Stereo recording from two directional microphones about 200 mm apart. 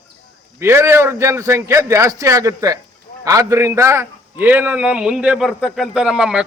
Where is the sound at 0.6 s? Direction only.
10° right (ahead or behind).